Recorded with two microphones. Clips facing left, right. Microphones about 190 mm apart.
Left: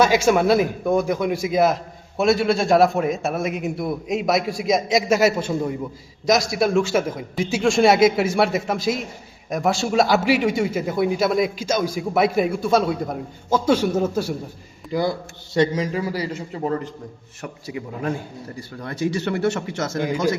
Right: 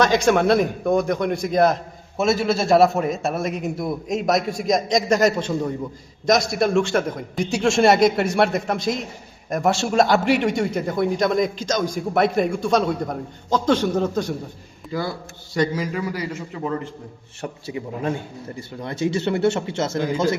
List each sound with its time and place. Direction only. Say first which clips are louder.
0.0 s a man's voice: even; 5° left (ahead or behind)
15.5 s a man's voice: left 2 dB; 25° left (ahead or behind)
17.4 s speech: right 2 dB; 25° right (ahead or behind)